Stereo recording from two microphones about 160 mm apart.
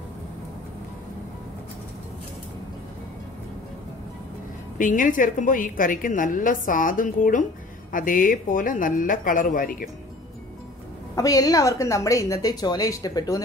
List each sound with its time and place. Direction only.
4.7 s a woman's voice: 55° left (ahead or behind)
11.1 s a woman's voice: 20° left (ahead or behind)